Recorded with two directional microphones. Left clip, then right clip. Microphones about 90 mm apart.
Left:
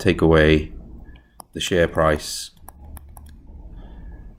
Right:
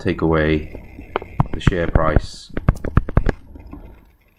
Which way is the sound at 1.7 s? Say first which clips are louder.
Left 2 dB; 30° left (ahead or behind).